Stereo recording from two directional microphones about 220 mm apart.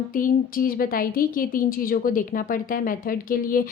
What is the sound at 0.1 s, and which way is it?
A woman's voice, 40° left (ahead or behind).